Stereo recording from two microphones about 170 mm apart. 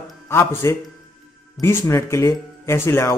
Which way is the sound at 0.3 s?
15° left (ahead or behind).